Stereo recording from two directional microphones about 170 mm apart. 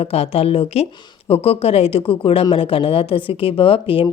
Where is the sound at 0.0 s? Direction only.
35° left (ahead or behind).